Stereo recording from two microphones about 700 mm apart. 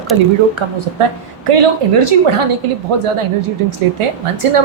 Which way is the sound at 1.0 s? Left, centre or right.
Right.